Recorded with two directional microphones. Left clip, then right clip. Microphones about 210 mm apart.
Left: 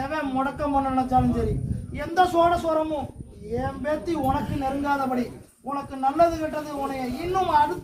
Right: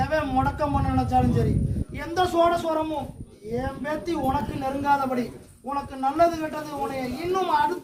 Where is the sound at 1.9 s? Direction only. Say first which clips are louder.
Left 2 dB; 10° left (ahead or behind).